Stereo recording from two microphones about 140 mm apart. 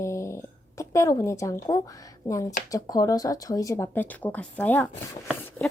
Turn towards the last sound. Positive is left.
turn(degrees=10)  # may be behind; listen again after turning